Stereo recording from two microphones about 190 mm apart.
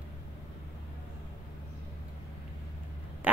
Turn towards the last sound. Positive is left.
turn(degrees=-10)  # may be behind; listen again after turning